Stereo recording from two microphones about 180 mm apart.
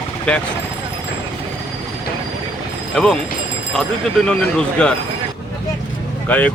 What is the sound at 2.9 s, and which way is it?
Speech, centre (ahead or behind).